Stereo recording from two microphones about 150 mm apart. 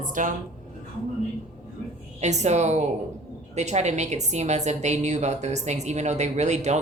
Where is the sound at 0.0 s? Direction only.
60° right (ahead or behind).